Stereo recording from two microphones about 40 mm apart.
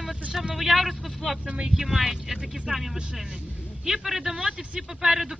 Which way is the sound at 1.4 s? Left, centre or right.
Right.